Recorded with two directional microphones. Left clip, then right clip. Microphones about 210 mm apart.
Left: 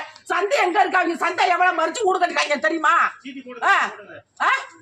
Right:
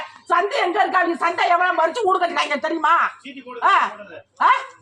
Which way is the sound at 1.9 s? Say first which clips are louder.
Right 1 dB; 30° left (ahead or behind).